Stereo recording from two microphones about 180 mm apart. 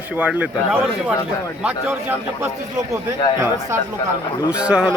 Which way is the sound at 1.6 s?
5° right (ahead or behind).